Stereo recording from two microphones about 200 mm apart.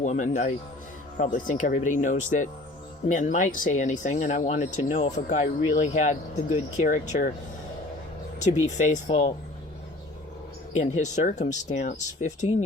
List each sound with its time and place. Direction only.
0.0 s speech: 35° left (ahead or behind)
8.6 s speech: 35° left (ahead or behind)
10.8 s speech: 35° left (ahead or behind)